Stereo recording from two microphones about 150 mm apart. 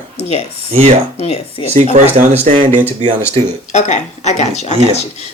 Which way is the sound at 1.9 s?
55° right (ahead or behind).